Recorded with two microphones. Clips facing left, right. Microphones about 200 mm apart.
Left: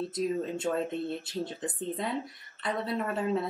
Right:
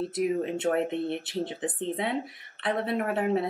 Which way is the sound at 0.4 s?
65° right (ahead or behind).